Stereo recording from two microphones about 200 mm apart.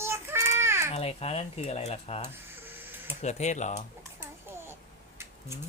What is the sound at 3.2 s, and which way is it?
Speech, 35° left (ahead or behind).